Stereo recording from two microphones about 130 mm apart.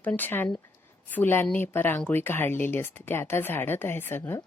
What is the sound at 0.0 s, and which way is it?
Speech, 15° left (ahead or behind).